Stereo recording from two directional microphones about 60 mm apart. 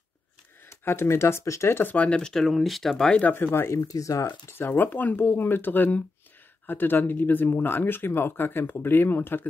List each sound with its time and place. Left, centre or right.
0.7 s speech: left
1.8 s speech: left; by 3.0 s centre
3.0 s speech: centre
3.3 s speech: left
3.7 s speech: left
4.5 s speech: left